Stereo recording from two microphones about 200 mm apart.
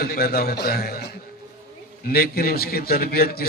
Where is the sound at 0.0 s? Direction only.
50° left (ahead or behind).